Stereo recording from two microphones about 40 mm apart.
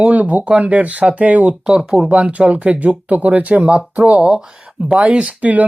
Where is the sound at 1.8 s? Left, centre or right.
Centre.